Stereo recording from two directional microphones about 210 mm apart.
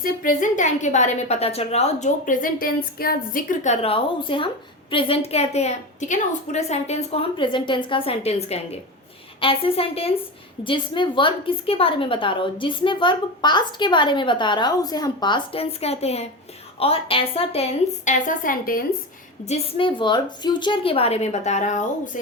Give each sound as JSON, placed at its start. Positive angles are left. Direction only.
{"t": 0.0, "sound": "a woman's voice", "side_deg": 40}
{"t": 19.5, "sound": "a woman's voice", "side_deg": 30}